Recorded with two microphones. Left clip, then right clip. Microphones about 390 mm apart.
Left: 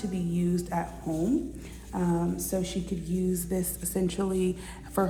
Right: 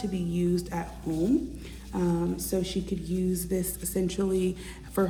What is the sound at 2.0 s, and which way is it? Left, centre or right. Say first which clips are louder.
A woman's voice: right 1 dB; centre.